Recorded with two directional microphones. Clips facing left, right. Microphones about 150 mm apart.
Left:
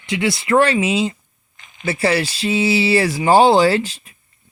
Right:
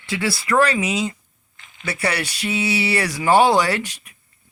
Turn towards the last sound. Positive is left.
turn(degrees=25)  # may be behind; listen again after turning